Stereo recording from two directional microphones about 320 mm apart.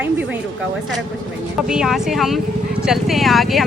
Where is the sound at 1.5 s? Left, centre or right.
Centre.